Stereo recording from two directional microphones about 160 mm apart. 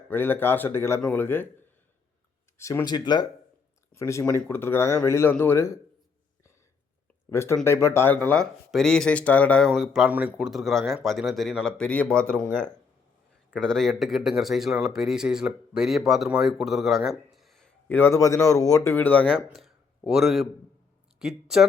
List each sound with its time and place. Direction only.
0.1 s speech: 15° left (ahead or behind)
2.6 s speech: 20° left (ahead or behind)
7.3 s speech: 15° left (ahead or behind); by 21.7 s 5° right (ahead or behind)